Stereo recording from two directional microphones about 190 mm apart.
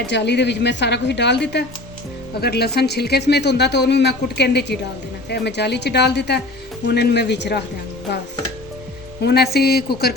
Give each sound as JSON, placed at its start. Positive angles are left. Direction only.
{"t": 0.1, "sound": "speech", "side_deg": 65}
{"t": 9.2, "sound": "speech", "side_deg": 60}